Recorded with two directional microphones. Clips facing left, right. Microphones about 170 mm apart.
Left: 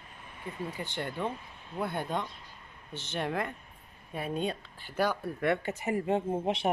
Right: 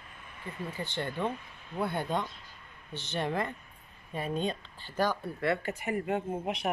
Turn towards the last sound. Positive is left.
turn(degrees=30)  # may be behind; listen again after turning